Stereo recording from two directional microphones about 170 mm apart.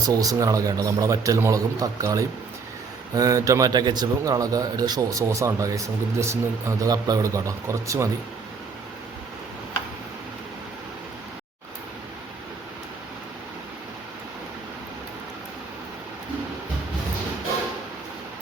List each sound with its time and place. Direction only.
0.1 s a man's voice: 20° right (ahead or behind)